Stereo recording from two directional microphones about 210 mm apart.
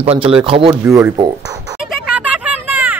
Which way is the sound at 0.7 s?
10° right (ahead or behind).